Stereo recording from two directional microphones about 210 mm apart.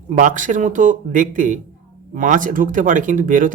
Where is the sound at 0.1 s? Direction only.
35° right (ahead or behind).